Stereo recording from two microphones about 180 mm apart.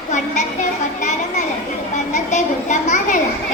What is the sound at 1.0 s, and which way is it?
Children playing, 40° left (ahead or behind).